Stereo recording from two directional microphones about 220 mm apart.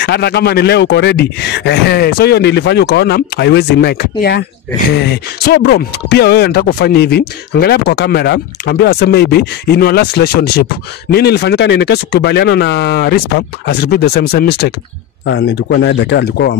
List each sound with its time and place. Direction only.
0.0 s speech: 50° left (ahead or behind)